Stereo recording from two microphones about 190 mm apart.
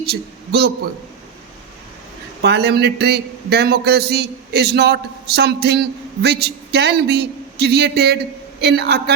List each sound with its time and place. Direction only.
0.0 s a man's voice: 60° right (ahead or behind)
2.4 s a man's voice: 60° right (ahead or behind)